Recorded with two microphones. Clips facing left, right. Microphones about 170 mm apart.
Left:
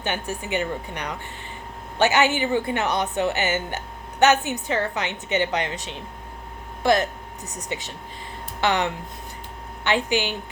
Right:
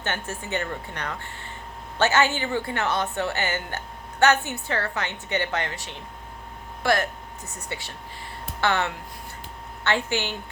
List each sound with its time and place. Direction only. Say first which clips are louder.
0.0 s a woman's voice: left 3 dB; 15° left (ahead or behind)